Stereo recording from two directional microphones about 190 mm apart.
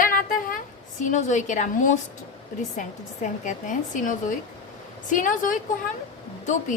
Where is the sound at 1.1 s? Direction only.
40° left (ahead or behind).